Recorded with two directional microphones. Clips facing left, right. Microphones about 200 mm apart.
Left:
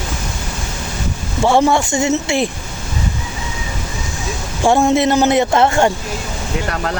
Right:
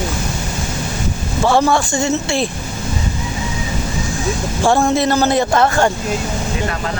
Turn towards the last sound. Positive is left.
turn(degrees=25)  # may be behind; listen again after turning